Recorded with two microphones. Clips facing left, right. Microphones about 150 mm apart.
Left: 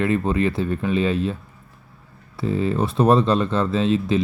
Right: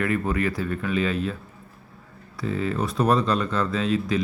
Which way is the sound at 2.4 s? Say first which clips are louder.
Left 4 dB; 30° left (ahead or behind).